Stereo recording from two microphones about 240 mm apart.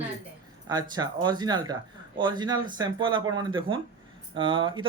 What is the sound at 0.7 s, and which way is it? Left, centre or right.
A man's voice, centre.